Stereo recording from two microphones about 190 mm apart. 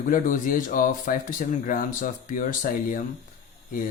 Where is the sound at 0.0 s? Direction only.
45° left (ahead or behind).